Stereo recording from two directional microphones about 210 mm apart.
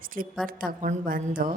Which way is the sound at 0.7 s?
40° right (ahead or behind).